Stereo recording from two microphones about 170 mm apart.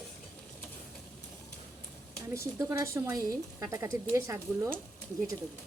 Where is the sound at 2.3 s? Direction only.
15° right (ahead or behind).